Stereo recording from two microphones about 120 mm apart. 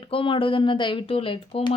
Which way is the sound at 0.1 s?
50° left (ahead or behind).